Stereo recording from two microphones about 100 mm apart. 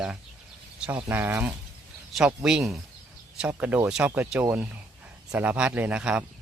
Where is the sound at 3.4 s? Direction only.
15° right (ahead or behind).